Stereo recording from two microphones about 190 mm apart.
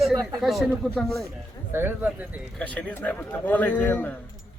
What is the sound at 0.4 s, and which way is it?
Speech, centre (ahead or behind).